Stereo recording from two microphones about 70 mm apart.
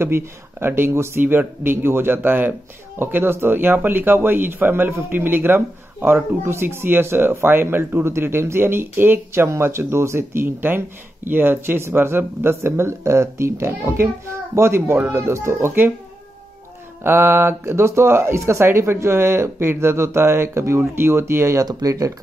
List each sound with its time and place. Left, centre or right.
0.0 s speech: right
17.0 s speech: right
21.6 s speech: right